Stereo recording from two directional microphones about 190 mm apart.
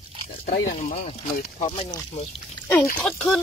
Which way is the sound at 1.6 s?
30° left (ahead or behind).